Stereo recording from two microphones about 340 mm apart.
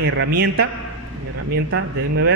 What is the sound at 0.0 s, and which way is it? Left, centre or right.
Mantra, right.